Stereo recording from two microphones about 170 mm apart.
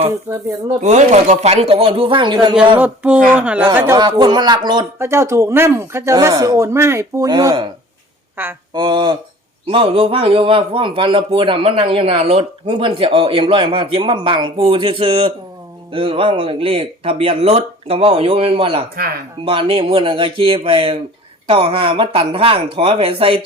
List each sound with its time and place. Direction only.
0.8 s a man's voice: 45° right (ahead or behind); by 2.6 s 25° right (ahead or behind)
2.7 s speech: 10° right (ahead or behind)
3.9 s speech: 25° right (ahead or behind)
8.4 s speech: 10° right (ahead or behind)
8.7 s a man's voice: 25° right (ahead or behind)